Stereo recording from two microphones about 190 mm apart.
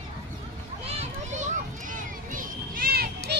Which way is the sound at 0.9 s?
35° right (ahead or behind).